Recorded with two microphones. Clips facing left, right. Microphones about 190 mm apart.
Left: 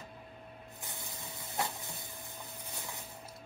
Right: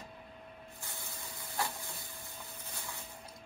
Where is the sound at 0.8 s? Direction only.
20° left (ahead or behind).